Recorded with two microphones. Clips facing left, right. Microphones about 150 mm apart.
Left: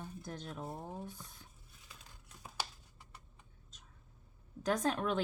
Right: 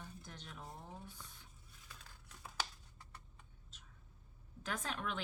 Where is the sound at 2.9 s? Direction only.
15° left (ahead or behind).